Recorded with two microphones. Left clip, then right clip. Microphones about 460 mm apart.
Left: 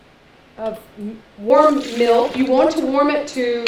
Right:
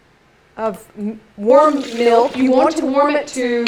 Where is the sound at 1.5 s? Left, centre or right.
Centre.